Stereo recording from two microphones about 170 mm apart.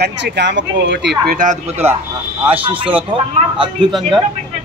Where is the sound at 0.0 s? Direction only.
90° right; by 1.6 s 55° right (ahead or behind).